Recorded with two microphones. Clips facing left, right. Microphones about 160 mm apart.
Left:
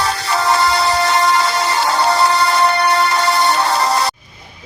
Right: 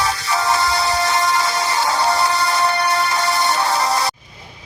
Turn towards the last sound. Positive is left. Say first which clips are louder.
# left 3 dB
turn(degrees=65)  # may be behind; listen again after turning